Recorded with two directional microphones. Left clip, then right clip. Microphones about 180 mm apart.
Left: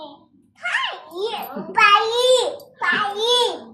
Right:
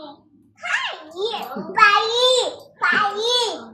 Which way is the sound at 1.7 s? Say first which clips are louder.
Even; 10° left (ahead or behind).